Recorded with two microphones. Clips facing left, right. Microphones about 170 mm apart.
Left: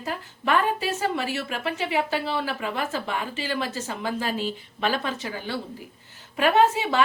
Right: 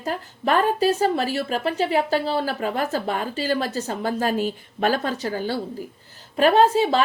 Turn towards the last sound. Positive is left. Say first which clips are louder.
# right 4 dB
turn(degrees=-35)  # may be behind; listen again after turning